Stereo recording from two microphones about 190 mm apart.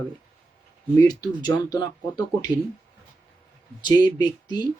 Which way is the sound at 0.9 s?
20° left (ahead or behind).